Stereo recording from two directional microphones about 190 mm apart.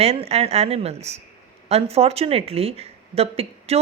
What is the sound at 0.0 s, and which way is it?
Speech, 30° right (ahead or behind).